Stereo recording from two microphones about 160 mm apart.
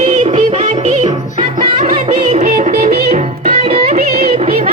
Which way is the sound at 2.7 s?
65° right (ahead or behind).